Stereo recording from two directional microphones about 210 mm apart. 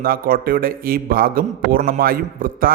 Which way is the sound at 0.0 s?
45° right (ahead or behind).